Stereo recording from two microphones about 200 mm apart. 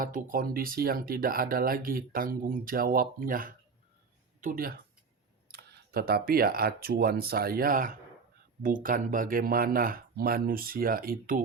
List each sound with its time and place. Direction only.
0.0 s speech: 45° right (ahead or behind)